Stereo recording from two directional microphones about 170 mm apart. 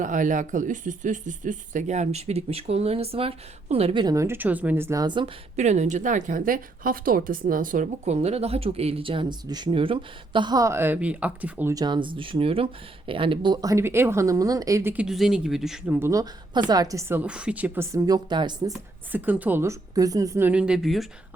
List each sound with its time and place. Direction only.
0.0 s a woman's voice: 50° right (ahead or behind)
4.0 s speech: 20° right (ahead or behind)
5.5 s a woman's voice: 40° right (ahead or behind); by 11.7 s 10° right (ahead or behind)
11.7 s a woman's voice: 25° right (ahead or behind); by 16.0 s centre (ahead or behind)
16.0 s a woman's voice: 20° right (ahead or behind)
19.1 s speech: 10° right (ahead or behind)